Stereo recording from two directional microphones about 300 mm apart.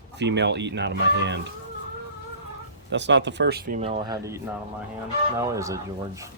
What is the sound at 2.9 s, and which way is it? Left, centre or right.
A man's voice, right.